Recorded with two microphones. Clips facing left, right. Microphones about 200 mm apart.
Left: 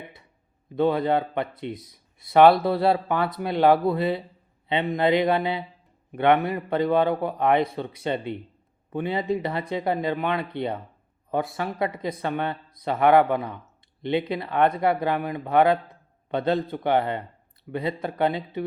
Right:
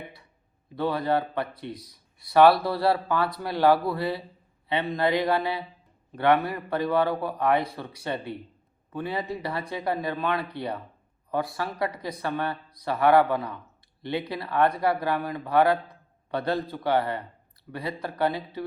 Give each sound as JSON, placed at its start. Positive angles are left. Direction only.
{"t": 0.8, "sound": "speech", "side_deg": 20}